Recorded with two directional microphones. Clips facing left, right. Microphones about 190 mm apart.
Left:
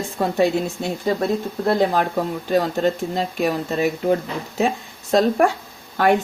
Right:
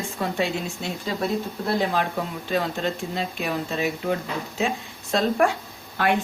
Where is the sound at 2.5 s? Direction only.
45° left (ahead or behind).